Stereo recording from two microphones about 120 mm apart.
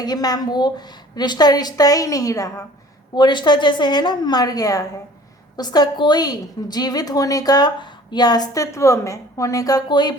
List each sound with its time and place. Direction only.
0.0 s a woman's voice: 35° left (ahead or behind)
3.2 s a woman's voice: 40° left (ahead or behind)